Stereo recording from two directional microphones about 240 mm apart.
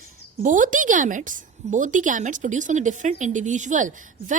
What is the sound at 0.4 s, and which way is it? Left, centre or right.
A woman's voice, right.